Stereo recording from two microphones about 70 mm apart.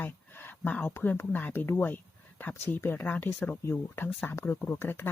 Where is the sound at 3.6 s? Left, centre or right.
Left.